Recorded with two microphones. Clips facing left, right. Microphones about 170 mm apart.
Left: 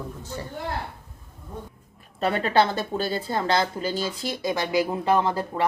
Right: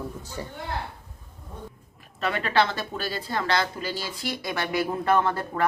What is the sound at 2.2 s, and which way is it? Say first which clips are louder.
Speech: left 3 dB; 35° left (ahead or behind).